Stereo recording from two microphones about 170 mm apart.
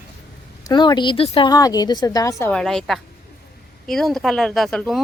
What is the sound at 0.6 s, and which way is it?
A woman's voice, 25° left (ahead or behind).